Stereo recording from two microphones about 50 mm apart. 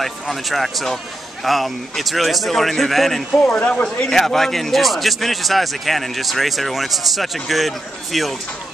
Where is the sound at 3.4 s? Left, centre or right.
Centre.